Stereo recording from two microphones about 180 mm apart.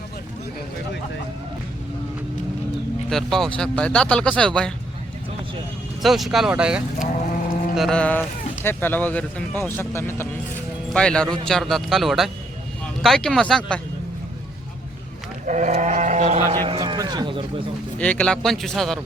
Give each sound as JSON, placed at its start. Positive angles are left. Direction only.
{"t": 3.1, "sound": "speech", "side_deg": 0}
{"t": 6.0, "sound": "speech", "side_deg": 0}
{"t": 7.0, "sound": "a sound", "side_deg": 50}
{"t": 7.8, "sound": "speech", "side_deg": 5}
{"t": 15.4, "sound": "speech", "side_deg": -40}
{"t": 16.5, "sound": "speech", "side_deg": -25}
{"t": 18.0, "sound": "speech", "side_deg": 5}